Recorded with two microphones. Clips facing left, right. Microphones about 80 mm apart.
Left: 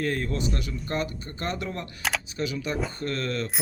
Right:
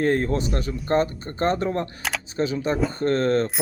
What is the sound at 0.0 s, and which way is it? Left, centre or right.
Speech, right.